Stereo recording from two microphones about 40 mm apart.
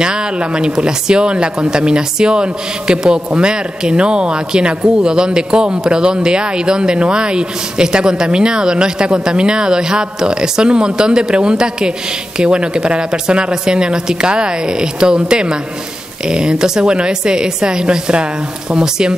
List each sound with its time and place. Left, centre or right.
0.0 s speech: right